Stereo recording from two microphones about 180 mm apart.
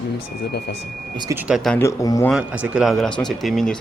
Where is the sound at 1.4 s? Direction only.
5° right (ahead or behind).